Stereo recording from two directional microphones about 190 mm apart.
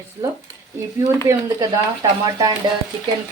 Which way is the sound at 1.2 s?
15° right (ahead or behind).